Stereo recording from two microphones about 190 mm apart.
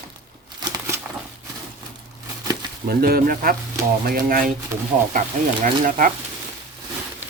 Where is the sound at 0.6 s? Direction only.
15° right (ahead or behind).